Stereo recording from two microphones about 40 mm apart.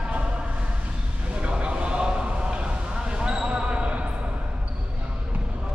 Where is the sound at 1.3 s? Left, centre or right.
Right.